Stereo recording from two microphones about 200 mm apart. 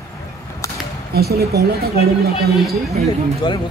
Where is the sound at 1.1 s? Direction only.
50° right (ahead or behind).